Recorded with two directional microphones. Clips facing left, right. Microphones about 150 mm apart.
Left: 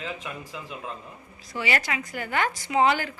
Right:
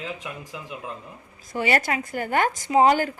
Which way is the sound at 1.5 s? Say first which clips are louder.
Right 5 dB; 50° right (ahead or behind).